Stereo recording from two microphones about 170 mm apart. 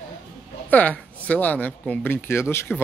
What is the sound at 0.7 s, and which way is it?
Speech, 10° left (ahead or behind).